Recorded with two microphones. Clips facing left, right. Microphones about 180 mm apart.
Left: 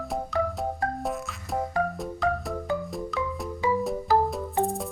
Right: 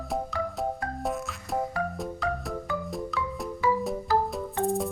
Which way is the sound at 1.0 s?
Centre (ahead or behind).